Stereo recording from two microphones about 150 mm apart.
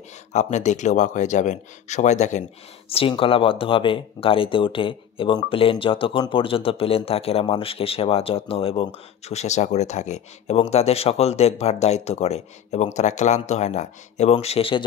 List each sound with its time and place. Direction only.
0.3 s speech: 50° left (ahead or behind)
2.9 s speech: 40° left (ahead or behind)